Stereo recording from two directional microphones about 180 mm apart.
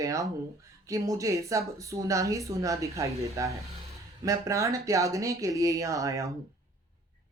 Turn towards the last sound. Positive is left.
turn(degrees=-20)  # may be behind; listen again after turning